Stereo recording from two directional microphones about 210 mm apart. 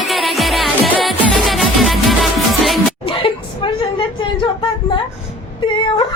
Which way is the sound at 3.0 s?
25° left (ahead or behind).